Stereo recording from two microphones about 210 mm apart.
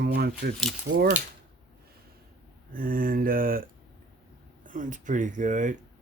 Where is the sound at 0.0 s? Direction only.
50° right (ahead or behind).